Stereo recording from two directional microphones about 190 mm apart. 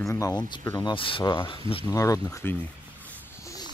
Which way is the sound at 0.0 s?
15° left (ahead or behind).